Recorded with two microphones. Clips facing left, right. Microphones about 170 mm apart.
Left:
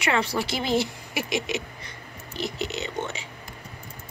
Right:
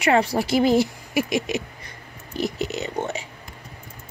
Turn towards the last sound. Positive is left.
turn(degrees=-40)  # may be behind; listen again after turning